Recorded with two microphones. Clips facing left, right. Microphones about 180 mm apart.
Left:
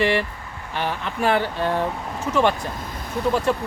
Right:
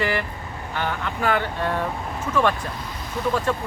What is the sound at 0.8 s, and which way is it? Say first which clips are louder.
Speech: left 2 dB; 25° left (ahead or behind).